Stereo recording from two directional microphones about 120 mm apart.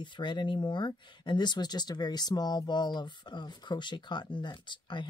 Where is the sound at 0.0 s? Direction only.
40° left (ahead or behind).